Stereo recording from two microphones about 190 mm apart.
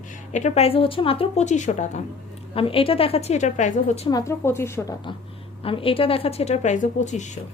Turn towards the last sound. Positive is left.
turn(degrees=40)  # may be behind; listen again after turning